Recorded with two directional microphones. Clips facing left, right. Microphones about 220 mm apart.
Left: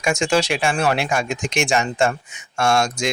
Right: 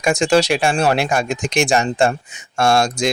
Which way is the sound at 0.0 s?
35° right (ahead or behind).